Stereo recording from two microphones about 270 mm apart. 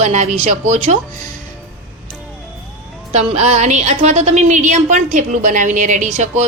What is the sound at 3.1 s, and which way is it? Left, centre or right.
A woman's voice, right.